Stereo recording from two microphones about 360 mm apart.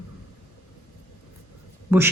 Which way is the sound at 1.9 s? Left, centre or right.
Centre.